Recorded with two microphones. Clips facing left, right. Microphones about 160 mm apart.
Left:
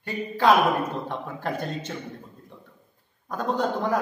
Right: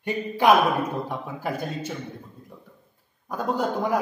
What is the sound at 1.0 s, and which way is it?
Speech, 5° right (ahead or behind).